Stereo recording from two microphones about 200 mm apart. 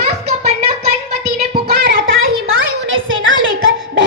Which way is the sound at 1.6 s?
50° right (ahead or behind).